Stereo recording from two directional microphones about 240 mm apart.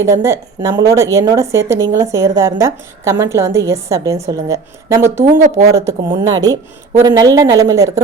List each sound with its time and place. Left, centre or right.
0.0 s a woman's voice: centre
5.2 s speech: right
6.1 s a woman's voice: centre